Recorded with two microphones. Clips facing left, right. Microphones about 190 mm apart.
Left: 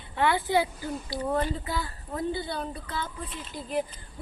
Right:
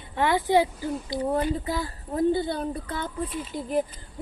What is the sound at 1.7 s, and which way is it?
Speech, 40° right (ahead or behind).